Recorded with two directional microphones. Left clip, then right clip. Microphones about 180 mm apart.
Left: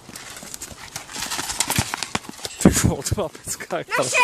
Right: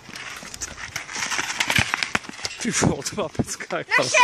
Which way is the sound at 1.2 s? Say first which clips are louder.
Right 2 dB; 20° left (ahead or behind).